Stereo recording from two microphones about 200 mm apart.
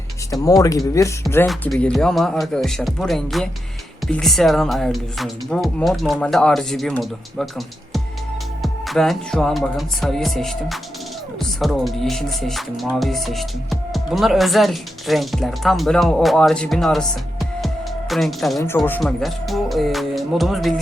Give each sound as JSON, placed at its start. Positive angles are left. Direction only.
{"t": 0.3, "sound": "speech", "side_deg": 15}
{"t": 1.5, "sound": "speech", "side_deg": 5}
{"t": 8.6, "sound": "speech", "side_deg": 0}
{"t": 18.1, "sound": "speech", "side_deg": 0}